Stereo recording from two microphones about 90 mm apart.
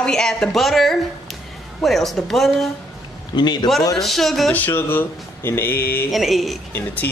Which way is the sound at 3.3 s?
55° left (ahead or behind).